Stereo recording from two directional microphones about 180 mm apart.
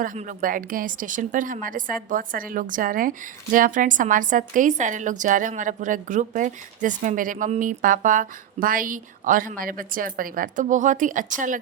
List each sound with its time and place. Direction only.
0.0 s a woman's voice: 45° right (ahead or behind)